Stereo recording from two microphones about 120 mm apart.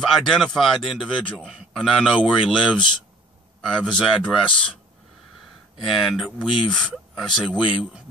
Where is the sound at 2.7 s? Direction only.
40° left (ahead or behind).